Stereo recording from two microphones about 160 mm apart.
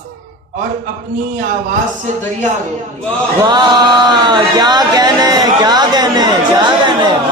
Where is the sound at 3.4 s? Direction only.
25° right (ahead or behind).